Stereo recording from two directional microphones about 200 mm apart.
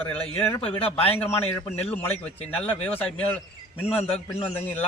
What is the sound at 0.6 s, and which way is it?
Speech, 30° left (ahead or behind).